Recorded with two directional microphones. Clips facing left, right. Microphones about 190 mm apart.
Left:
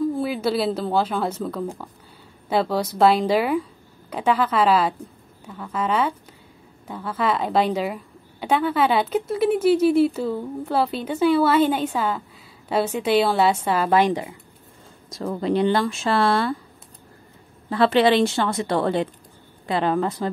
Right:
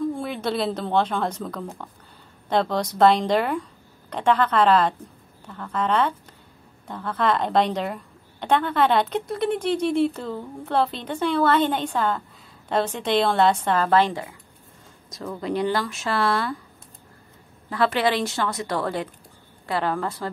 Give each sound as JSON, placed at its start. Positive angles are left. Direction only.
{"t": 0.0, "sound": "a woman's voice", "side_deg": 5}
{"t": 15.0, "sound": "speech", "side_deg": 30}
{"t": 17.6, "sound": "speech", "side_deg": 30}